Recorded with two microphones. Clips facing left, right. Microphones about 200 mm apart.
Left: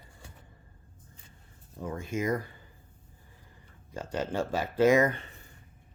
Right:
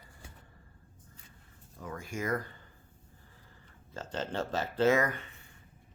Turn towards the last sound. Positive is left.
turn(degrees=35)  # may be behind; listen again after turning